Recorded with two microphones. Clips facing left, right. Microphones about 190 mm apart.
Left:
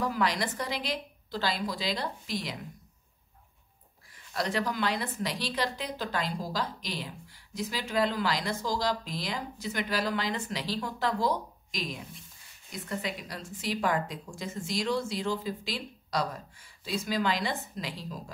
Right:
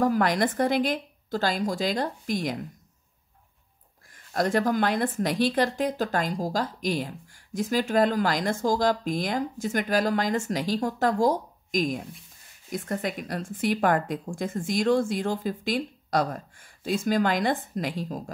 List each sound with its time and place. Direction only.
0.0 s a woman's voice: 50° right (ahead or behind)
4.1 s a woman's voice: 50° right (ahead or behind)